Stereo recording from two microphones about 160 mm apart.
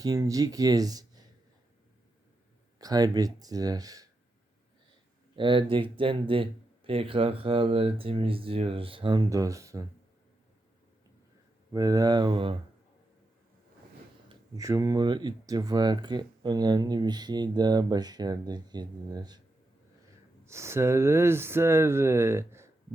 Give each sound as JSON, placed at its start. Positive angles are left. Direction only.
{"t": 0.0, "sound": "speech", "side_deg": -20}
{"t": 2.7, "sound": "speech", "side_deg": -25}
{"t": 5.4, "sound": "speech", "side_deg": -30}
{"t": 11.7, "sound": "speech", "side_deg": -20}
{"t": 14.3, "sound": "speech", "side_deg": -20}
{"t": 20.4, "sound": "speech", "side_deg": -15}